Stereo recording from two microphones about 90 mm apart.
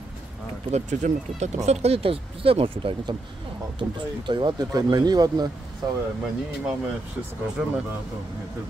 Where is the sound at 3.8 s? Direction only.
60° right (ahead or behind).